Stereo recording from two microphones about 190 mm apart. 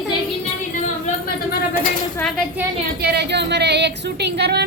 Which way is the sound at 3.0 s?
60° right (ahead or behind).